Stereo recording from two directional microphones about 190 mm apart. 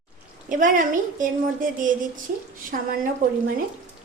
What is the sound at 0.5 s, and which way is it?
Speech, 45° right (ahead or behind).